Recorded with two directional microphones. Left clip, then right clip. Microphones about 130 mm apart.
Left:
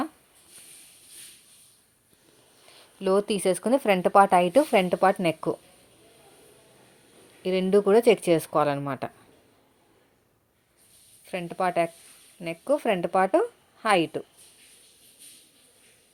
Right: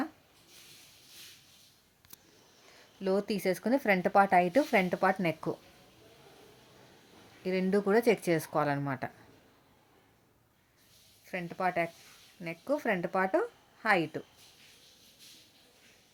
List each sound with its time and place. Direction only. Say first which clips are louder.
3.0 s speech: left 7 dB; 10° left (ahead or behind)
7.4 s speech: left 8 dB; 10° left (ahead or behind)
11.3 s speech: left 5 dB; 15° left (ahead or behind)